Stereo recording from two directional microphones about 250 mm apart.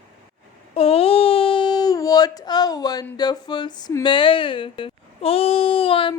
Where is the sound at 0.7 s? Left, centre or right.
Left.